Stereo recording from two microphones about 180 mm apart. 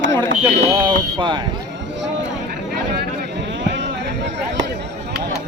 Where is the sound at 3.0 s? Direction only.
80° right.